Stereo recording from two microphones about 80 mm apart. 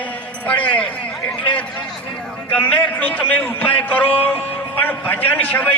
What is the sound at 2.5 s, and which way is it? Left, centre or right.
A man's voice, left.